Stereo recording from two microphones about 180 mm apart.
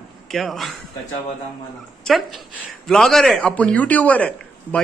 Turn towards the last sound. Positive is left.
turn(degrees=10)  # may be behind; listen again after turning